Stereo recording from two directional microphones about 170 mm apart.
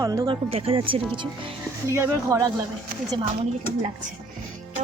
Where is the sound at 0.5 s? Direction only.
35° right (ahead or behind).